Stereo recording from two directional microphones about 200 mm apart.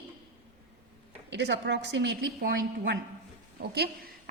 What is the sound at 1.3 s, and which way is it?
A woman's voice, 60° right (ahead or behind).